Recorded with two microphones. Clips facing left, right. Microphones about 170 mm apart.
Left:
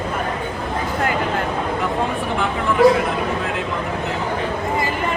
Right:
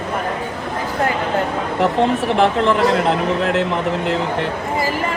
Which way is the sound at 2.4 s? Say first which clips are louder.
Right 1 dB; 70° right (ahead or behind).